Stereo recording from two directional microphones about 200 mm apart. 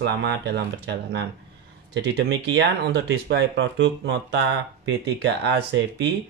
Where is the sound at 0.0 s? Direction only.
60° right (ahead or behind).